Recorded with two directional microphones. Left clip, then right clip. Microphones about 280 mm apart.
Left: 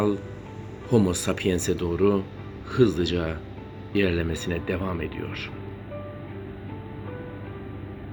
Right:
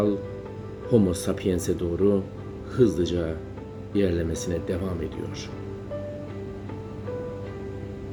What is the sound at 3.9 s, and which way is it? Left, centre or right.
Speech, centre.